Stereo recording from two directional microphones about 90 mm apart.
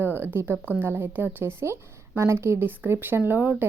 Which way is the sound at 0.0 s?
25° right (ahead or behind).